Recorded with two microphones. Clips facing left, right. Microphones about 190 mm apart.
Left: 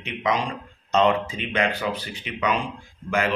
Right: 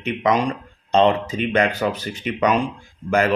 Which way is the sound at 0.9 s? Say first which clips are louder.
Right 3 dB; 30° right (ahead or behind).